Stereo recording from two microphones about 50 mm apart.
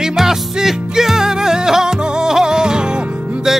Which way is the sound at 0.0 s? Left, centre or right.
Centre.